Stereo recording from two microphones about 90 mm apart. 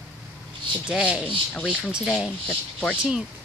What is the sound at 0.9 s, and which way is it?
Speech, 10° right (ahead or behind).